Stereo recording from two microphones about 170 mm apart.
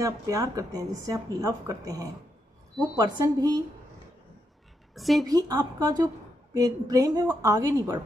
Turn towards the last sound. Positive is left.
turn(degrees=-20)  # may be behind; listen again after turning